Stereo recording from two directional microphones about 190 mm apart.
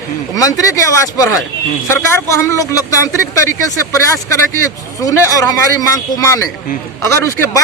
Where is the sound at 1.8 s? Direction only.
15° left (ahead or behind).